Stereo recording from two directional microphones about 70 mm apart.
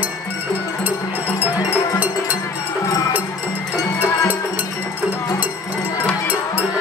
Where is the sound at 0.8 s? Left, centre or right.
Right.